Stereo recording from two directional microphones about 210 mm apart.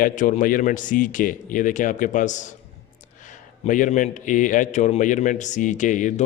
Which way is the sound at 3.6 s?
35° left (ahead or behind).